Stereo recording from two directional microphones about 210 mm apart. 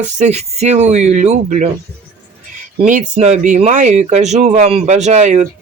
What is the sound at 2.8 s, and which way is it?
Speech, 35° right (ahead or behind).